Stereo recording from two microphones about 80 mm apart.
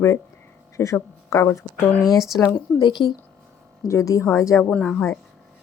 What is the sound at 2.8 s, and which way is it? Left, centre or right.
Speech, left.